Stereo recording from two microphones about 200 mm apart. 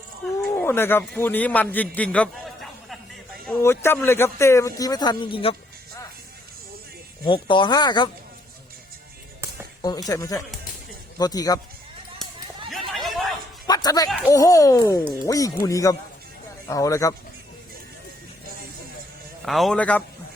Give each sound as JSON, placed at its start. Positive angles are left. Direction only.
{"t": 0.4, "sound": "a man's voice", "side_deg": 10}
{"t": 7.3, "sound": "speech", "side_deg": 25}
{"t": 10.1, "sound": "a man's voice", "side_deg": 15}
{"t": 12.9, "sound": "a sound", "side_deg": 0}
{"t": 13.7, "sound": "music", "side_deg": 20}
{"t": 14.3, "sound": "a man's voice", "side_deg": 15}
{"t": 19.5, "sound": "a man's voice", "side_deg": 0}